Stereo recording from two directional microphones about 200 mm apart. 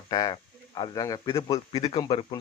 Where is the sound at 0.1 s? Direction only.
20° left (ahead or behind).